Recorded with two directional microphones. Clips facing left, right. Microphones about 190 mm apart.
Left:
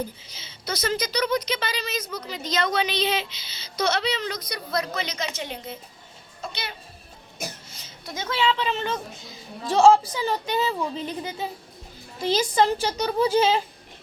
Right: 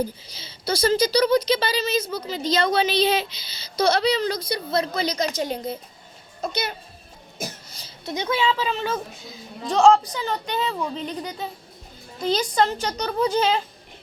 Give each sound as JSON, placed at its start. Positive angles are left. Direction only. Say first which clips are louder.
{"t": 0.3, "sound": "a woman's voice", "louder": "right 6 dB", "side_deg": -35}
{"t": 8.0, "sound": "a child's voice", "louder": "right 2 dB", "side_deg": -20}